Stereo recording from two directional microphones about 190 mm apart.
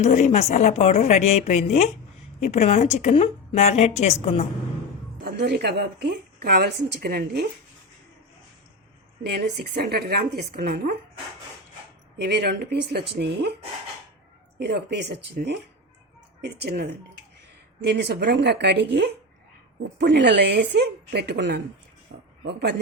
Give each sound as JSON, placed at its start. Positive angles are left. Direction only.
{"t": 0.0, "sound": "a woman's voice", "side_deg": 40}
{"t": 5.2, "sound": "a woman's voice", "side_deg": -60}
{"t": 9.2, "sound": "a woman's voice", "side_deg": -60}
{"t": 12.2, "sound": "a woman's voice", "side_deg": -60}
{"t": 14.6, "sound": "a woman's voice", "side_deg": -65}